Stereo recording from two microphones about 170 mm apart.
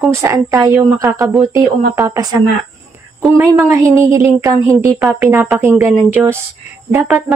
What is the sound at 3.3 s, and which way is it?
A woman's voice, 15° right (ahead or behind).